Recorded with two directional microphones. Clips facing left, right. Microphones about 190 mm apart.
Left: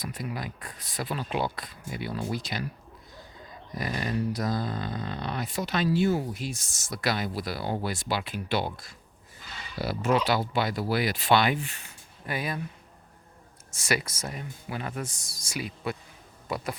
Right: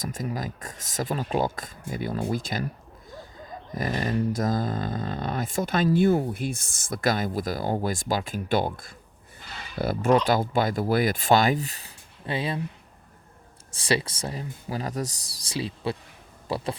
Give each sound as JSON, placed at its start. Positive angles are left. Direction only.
{"t": 0.0, "sound": "speech", "side_deg": -45}
{"t": 3.7, "sound": "speech", "side_deg": -45}
{"t": 13.7, "sound": "speech", "side_deg": -30}